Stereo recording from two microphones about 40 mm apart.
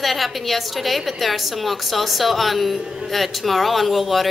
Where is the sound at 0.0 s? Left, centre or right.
Centre.